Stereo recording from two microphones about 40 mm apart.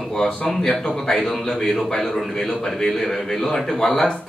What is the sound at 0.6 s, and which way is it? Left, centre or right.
A man's voice, centre.